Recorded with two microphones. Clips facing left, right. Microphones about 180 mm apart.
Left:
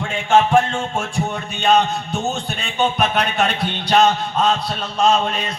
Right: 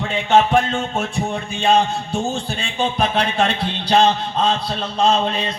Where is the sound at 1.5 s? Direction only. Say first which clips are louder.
Even; 30° right (ahead or behind).